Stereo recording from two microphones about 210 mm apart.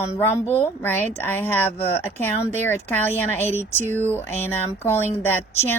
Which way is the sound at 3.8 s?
35° right (ahead or behind).